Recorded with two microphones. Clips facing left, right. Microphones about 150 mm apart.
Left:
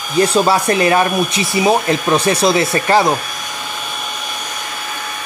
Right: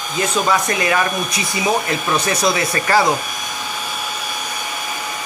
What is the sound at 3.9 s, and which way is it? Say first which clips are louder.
Vacuum cleaner: even; 10° right (ahead or behind).